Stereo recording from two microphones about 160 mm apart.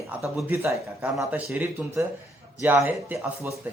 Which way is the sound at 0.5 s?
15° right (ahead or behind).